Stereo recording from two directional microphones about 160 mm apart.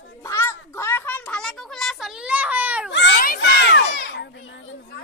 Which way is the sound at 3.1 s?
65° left (ahead or behind).